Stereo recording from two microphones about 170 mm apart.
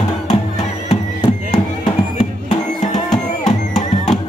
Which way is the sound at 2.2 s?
40° left (ahead or behind).